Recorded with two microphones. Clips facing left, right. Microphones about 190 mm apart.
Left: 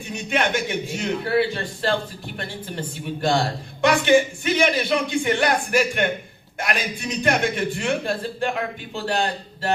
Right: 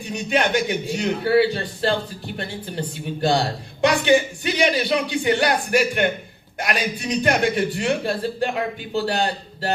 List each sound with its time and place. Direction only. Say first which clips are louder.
0.1 s a man's voice: right 3 dB; 35° right (ahead or behind)